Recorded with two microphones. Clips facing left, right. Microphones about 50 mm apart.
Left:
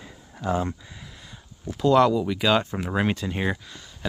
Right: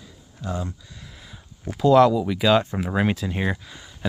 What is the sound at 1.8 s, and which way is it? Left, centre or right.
Speech, centre.